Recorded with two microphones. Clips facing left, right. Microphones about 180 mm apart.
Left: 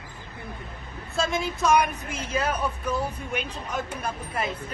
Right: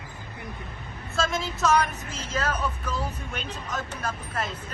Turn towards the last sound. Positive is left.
turn(degrees=10)  # may be behind; listen again after turning